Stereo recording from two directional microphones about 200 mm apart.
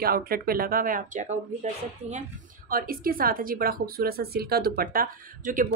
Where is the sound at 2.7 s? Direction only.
45° right (ahead or behind).